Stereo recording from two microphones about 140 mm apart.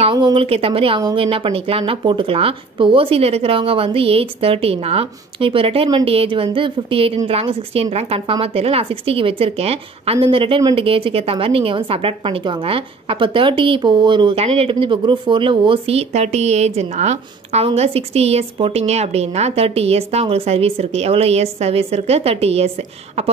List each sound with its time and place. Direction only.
0.0 s speech: 35° right (ahead or behind)
14.3 s speech: 45° right (ahead or behind)